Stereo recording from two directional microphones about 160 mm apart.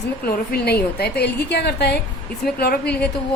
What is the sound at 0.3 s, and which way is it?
A woman's voice, 80° left.